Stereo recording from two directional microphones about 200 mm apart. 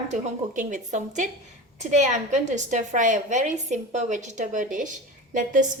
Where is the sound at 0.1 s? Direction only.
40° right (ahead or behind).